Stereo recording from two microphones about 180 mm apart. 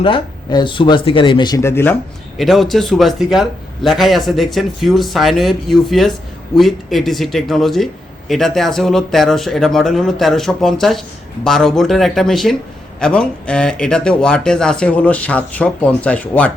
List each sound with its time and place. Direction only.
0.0 s speech: 30° left (ahead or behind); by 2.0 s 10° left (ahead or behind)
2.4 s a man's voice: centre (ahead or behind)